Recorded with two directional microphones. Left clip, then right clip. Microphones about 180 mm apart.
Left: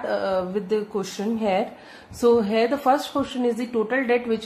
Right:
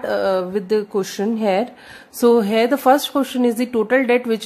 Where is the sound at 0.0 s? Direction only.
65° right (ahead or behind).